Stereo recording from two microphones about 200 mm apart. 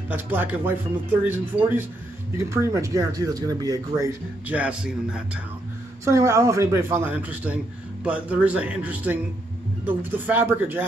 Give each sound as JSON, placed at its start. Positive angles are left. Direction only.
{"t": 0.1, "sound": "speech", "side_deg": -10}